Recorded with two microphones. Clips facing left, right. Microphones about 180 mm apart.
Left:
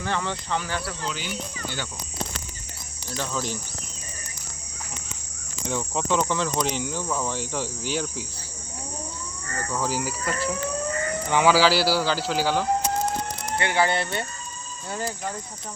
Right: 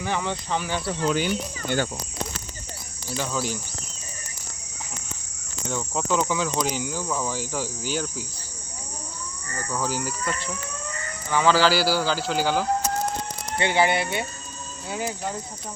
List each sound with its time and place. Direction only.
0.0 s speech: 15° right (ahead or behind)
1.0 s speech: 50° right (ahead or behind)
3.1 s speech: 5° right (ahead or behind)
5.6 s speech: centre (ahead or behind)
9.6 s speech: centre (ahead or behind)
11.3 s speech: 15° left (ahead or behind)
11.5 s speech: centre (ahead or behind)
13.6 s speech: 20° right (ahead or behind)